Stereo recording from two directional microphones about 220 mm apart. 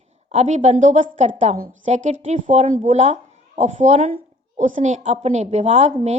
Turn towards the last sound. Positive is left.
turn(degrees=-30)  # may be behind; listen again after turning